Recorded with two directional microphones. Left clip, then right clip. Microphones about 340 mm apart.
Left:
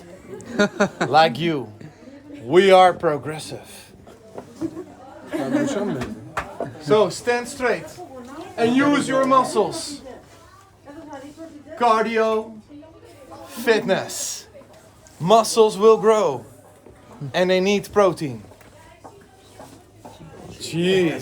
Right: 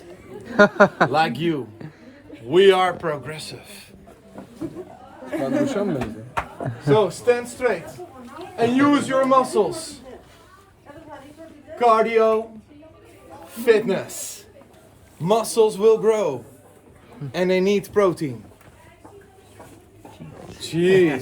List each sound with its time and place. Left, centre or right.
0.4 s a man's voice: centre
2.5 s a man's voice: left
5.3 s a man's voice: centre
11.8 s a man's voice: centre
13.4 s a man's voice: centre